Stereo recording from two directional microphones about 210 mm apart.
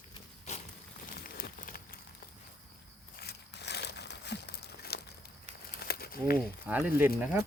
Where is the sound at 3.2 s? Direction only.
50° left (ahead or behind).